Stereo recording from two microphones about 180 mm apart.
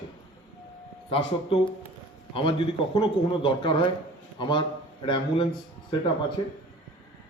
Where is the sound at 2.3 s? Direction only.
30° left (ahead or behind).